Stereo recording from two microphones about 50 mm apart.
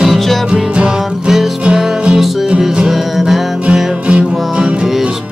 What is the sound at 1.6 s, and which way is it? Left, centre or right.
Music, centre.